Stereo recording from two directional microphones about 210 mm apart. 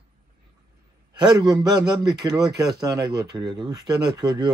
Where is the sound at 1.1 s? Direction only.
20° right (ahead or behind).